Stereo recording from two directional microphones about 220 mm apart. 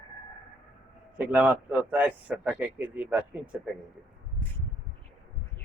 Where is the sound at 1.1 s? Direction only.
10° right (ahead or behind).